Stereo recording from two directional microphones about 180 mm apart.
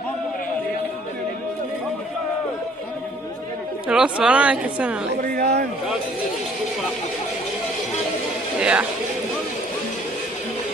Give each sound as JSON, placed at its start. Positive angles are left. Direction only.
{"t": 3.9, "sound": "speech", "side_deg": -5}
{"t": 5.1, "sound": "a sound", "side_deg": -60}
{"t": 8.5, "sound": "speech", "side_deg": -5}